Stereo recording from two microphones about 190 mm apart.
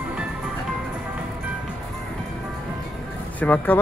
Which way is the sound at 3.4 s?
10° left (ahead or behind).